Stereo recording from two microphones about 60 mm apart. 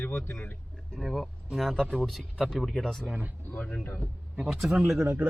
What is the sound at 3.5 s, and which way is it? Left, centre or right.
Speech, left.